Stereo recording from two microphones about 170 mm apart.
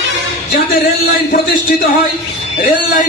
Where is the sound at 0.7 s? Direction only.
60° left (ahead or behind).